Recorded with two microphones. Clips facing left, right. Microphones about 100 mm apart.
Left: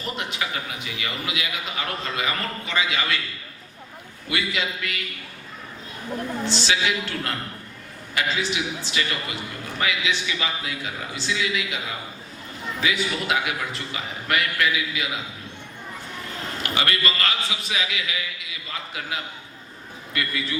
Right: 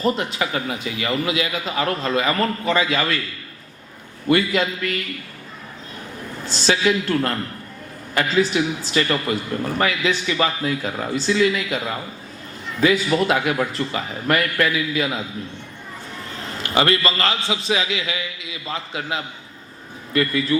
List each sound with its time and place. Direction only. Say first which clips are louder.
0.0 s a man's voice: right 8 dB; 35° right (ahead or behind)
4.3 s a man's voice: right 9 dB; 45° right (ahead or behind)
6.4 s a man's voice: right 6 dB; 45° right (ahead or behind)
8.1 s a man's voice: right 7 dB; 45° right (ahead or behind)
16.7 s a man's voice: right 7 dB; 30° right (ahead or behind)
20.1 s a man's voice: right 9 dB; 40° right (ahead or behind)